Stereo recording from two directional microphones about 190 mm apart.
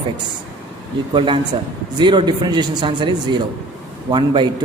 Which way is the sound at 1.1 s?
25° right (ahead or behind).